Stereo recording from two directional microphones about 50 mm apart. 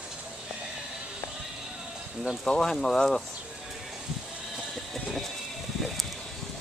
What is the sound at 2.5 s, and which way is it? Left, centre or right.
Speech, centre.